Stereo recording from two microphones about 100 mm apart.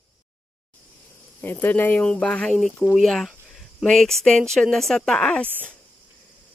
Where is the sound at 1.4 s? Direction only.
20° left (ahead or behind).